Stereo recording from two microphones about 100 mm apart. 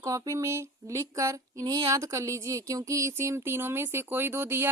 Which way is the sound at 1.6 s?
50° right (ahead or behind).